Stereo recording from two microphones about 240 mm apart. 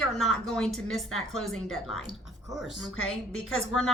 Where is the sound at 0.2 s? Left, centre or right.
Centre.